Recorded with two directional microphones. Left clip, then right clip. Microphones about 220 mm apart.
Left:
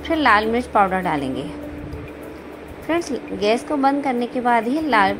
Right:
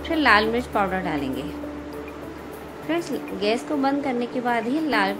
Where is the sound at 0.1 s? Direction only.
10° left (ahead or behind).